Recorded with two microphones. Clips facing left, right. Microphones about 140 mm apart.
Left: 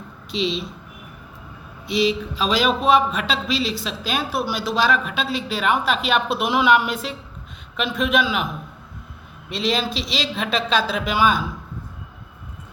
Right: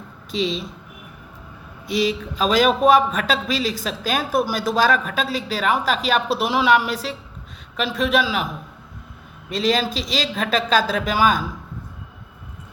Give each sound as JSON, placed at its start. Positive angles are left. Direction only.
{"t": 0.3, "sound": "a man's voice", "side_deg": -45}
{"t": 1.9, "sound": "a man's voice", "side_deg": -45}
{"t": 9.5, "sound": "a man's voice", "side_deg": -45}